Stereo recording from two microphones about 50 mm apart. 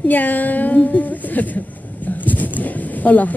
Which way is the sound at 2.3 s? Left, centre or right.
Left.